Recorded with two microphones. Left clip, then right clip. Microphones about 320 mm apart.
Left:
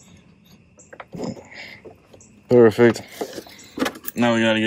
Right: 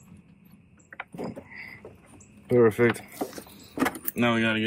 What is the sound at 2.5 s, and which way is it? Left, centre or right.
Speech, centre.